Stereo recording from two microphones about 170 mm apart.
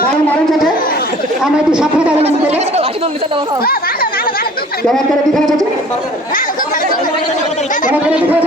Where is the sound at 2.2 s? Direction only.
40° right (ahead or behind).